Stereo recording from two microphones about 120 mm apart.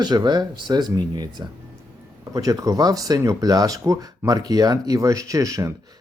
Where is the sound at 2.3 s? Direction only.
30° right (ahead or behind).